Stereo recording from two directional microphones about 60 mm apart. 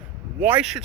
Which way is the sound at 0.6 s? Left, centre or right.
Centre.